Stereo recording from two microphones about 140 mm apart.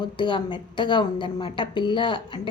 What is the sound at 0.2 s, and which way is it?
A woman's voice, 35° left (ahead or behind).